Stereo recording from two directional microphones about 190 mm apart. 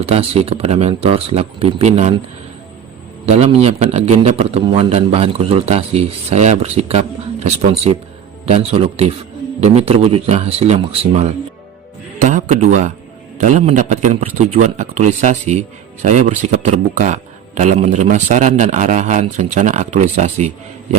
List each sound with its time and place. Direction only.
0.0 s a man's voice: 30° right (ahead or behind)
3.2 s a man's voice: 30° right (ahead or behind)